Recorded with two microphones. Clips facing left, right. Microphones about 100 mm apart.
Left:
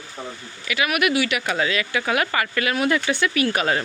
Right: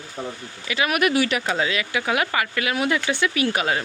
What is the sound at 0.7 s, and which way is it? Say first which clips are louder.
Speech: even; 30° right (ahead or behind).